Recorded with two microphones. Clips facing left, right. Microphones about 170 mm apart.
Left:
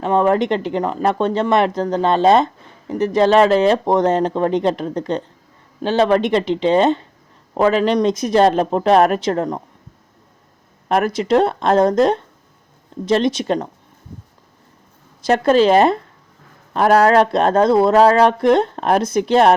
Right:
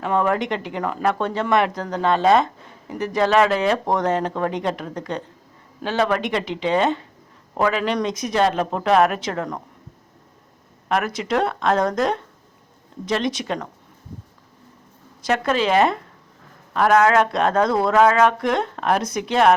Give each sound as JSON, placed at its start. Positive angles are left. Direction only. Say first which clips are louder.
{"t": 0.0, "sound": "speech", "louder": "left 5 dB", "side_deg": 30}
{"t": 10.8, "sound": "speech", "louder": "left 6 dB", "side_deg": 35}
{"t": 15.3, "sound": "speech", "louder": "left 7 dB", "side_deg": 35}